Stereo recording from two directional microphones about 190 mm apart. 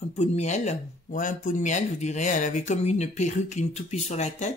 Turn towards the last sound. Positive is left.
turn(degrees=35)  # may be behind; listen again after turning